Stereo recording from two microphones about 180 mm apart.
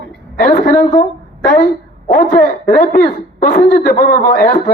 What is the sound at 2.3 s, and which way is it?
A woman's voice, 50° left (ahead or behind).